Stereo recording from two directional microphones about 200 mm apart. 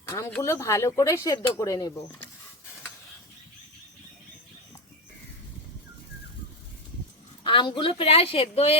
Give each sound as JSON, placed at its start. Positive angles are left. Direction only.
{"t": 0.1, "sound": "speech", "side_deg": 10}
{"t": 7.4, "sound": "a woman's voice", "side_deg": 25}